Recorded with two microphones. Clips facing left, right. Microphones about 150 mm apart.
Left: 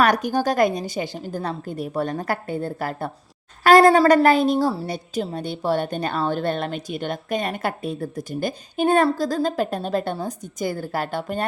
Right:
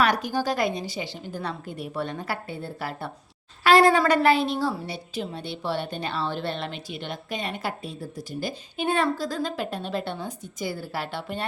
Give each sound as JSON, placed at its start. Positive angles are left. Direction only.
{"t": 0.0, "sound": "a woman's voice", "side_deg": 45}